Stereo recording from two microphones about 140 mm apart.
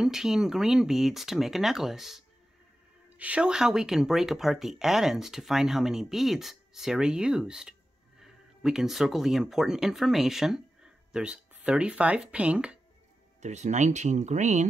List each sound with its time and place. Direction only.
0.0 s speech: 5° right (ahead or behind)
13.4 s speech: 55° right (ahead or behind)